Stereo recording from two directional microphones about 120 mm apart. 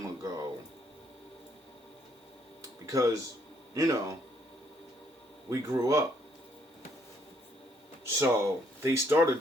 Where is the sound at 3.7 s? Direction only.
30° right (ahead or behind).